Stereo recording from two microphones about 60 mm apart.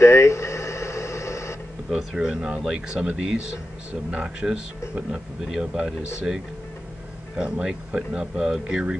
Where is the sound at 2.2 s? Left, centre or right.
Centre.